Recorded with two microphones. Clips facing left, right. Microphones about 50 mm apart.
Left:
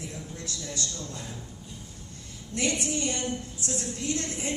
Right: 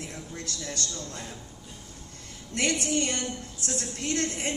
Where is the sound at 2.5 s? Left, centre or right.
Right.